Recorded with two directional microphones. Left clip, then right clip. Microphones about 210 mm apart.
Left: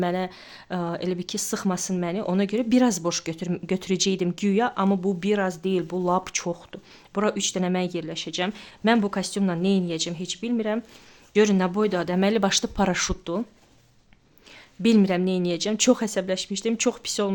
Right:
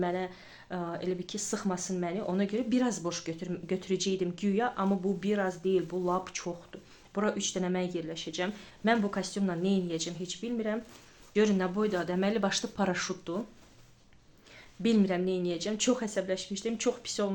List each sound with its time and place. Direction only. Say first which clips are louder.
0.0 s speech: left 6 dB; 55° left (ahead or behind)
14.8 s speech: left 7 dB; 55° left (ahead or behind)